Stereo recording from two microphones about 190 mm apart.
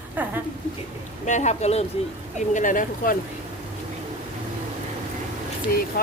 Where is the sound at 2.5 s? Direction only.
45° left (ahead or behind).